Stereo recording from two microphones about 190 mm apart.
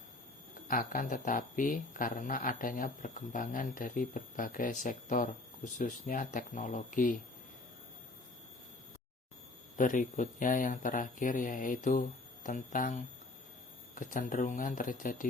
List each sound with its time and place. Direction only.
0.7 s speech: 45° left (ahead or behind)
9.7 s speech: 45° left (ahead or behind)